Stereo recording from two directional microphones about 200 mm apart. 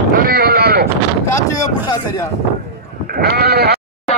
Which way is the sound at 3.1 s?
50° right (ahead or behind).